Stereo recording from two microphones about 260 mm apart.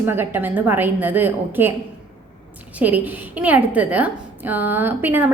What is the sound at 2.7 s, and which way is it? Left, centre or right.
A woman's voice, centre.